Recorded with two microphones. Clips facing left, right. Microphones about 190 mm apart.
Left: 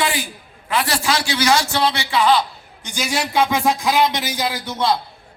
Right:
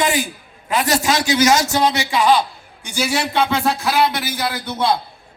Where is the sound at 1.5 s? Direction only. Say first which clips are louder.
Right 2 dB; 40° right (ahead or behind).